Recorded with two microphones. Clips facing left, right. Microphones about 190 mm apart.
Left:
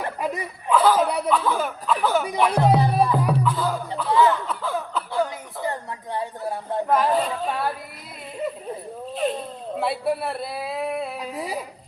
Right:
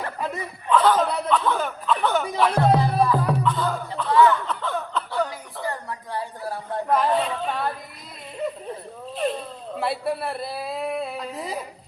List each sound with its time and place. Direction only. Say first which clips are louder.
0.0 s speech: left 2 dB; 15° left (ahead or behind)
4.1 s speech: right 1 dB; 25° left (ahead or behind)
4.4 s laughter: left 1 dB; 10° left (ahead or behind)
5.6 s speech: left 2 dB; 20° left (ahead or behind)
6.8 s speech: even; 5° left (ahead or behind)
9.1 s speech: left 1 dB; centre (ahead or behind)